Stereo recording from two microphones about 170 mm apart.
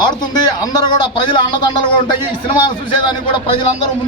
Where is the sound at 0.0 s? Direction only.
25° left (ahead or behind).